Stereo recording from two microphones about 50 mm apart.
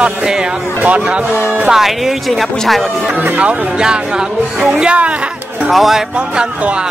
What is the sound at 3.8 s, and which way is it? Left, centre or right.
Speech, centre.